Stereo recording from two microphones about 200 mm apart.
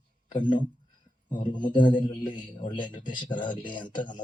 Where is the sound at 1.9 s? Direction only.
40° left (ahead or behind).